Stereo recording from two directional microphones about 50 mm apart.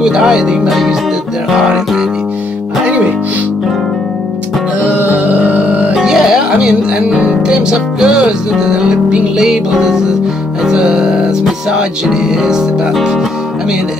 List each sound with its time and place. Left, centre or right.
0.0 s speech: centre
0.7 s music: centre
1.6 s speech: centre
4.8 s music: right
5.9 s speech: centre
10.6 s music: centre